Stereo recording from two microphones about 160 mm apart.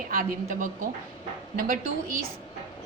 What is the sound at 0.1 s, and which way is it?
A woman's voice, 60° right (ahead or behind).